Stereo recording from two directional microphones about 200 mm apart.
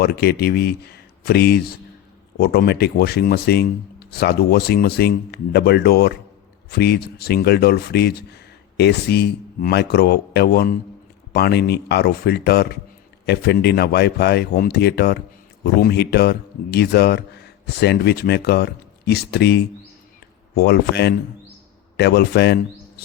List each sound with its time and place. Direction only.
0.0 s speech: 50° left (ahead or behind)